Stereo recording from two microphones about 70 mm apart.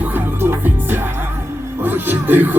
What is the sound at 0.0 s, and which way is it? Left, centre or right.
Music, right.